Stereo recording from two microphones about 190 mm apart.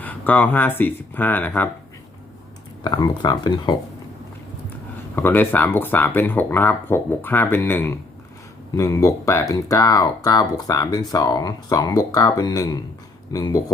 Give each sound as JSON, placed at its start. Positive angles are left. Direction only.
{"t": 0.0, "sound": "speech", "side_deg": 10}
{"t": 2.8, "sound": "speech", "side_deg": 20}
{"t": 5.1, "sound": "speech", "side_deg": 10}